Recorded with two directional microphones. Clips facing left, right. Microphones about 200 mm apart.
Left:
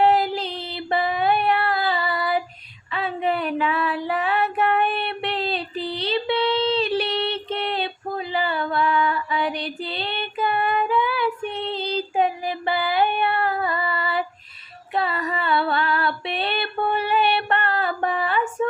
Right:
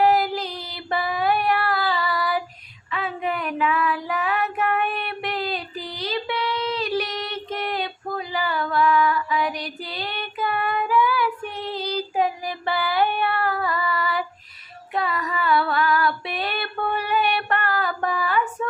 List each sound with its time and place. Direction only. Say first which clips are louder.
0.0 s music: left 1 dB; 25° left (ahead or behind)
2.9 s female singing: left 3 dB; 30° left (ahead or behind)